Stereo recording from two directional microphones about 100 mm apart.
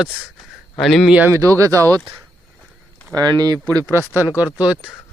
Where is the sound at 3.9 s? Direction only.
20° right (ahead or behind).